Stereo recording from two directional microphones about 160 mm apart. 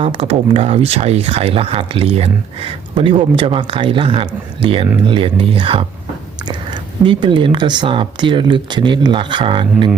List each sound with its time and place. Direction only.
0.0 s speech: 35° right (ahead or behind)
7.0 s speech: 30° right (ahead or behind)